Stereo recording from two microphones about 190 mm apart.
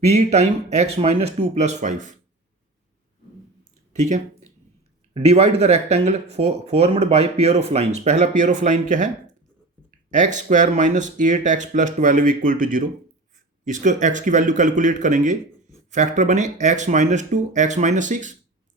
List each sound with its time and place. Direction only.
0.0 s speech: 35° right (ahead or behind)
5.1 s speech: 35° right (ahead or behind)